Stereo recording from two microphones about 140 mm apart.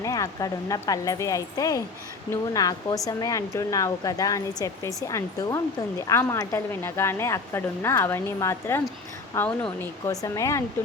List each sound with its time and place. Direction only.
0.0 s a woman's voice: 25° left (ahead or behind)